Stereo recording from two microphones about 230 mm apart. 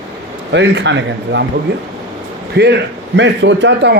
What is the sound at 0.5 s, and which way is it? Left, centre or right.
Speech, right.